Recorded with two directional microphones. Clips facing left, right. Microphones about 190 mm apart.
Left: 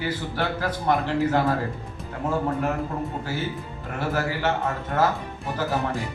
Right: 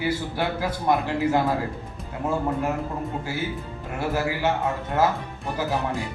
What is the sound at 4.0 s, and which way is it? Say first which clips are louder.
A man's voice: right 1 dB; 10° right (ahead or behind).